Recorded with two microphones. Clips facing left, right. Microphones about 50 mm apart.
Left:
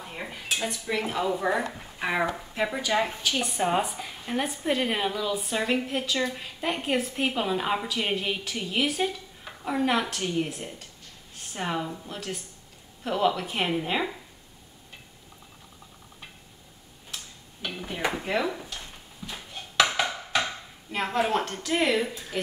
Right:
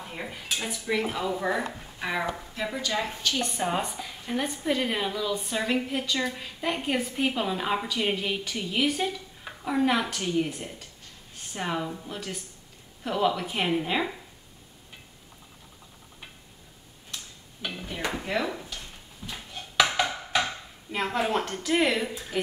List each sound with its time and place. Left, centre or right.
0.0 s a woman's voice: centre
3.1 s a woman's voice: centre
17.1 s tick-tock: centre
17.8 s speech: centre
19.3 s a sound: centre
22.1 s a woman's voice: centre